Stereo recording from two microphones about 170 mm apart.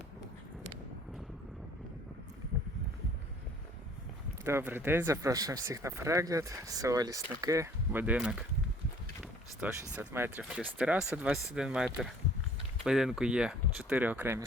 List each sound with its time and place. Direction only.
4.4 s speech: 15° right (ahead or behind)
9.6 s speech: 10° right (ahead or behind)